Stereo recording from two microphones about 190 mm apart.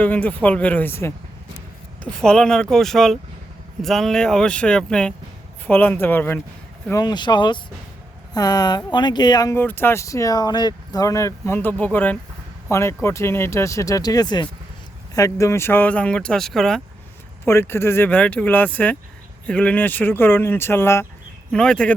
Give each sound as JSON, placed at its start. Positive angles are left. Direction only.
{"t": 0.0, "sound": "speech", "side_deg": 10}
{"t": 7.0, "sound": "speech", "side_deg": 25}
{"t": 17.4, "sound": "speech", "side_deg": 15}